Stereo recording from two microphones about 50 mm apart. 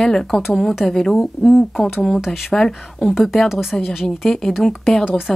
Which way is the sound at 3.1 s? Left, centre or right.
Centre.